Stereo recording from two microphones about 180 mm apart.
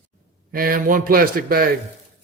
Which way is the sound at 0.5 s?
55° right (ahead or behind).